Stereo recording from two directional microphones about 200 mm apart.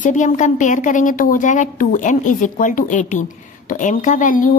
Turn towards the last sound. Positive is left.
turn(degrees=40)  # may be behind; listen again after turning